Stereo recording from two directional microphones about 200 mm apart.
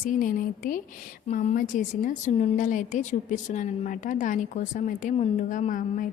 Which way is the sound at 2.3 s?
30° left (ahead or behind).